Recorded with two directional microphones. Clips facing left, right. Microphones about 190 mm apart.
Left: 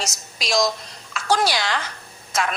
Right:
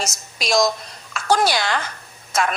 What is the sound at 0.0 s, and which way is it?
A woman's voice, 55° right (ahead or behind).